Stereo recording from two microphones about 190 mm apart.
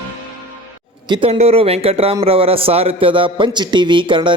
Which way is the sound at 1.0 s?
25° right (ahead or behind).